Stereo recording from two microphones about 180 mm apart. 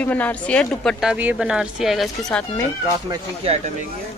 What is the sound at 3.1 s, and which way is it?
Speech, 30° right (ahead or behind).